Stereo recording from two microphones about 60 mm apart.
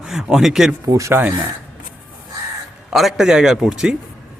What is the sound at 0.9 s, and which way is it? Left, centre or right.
Speech, right.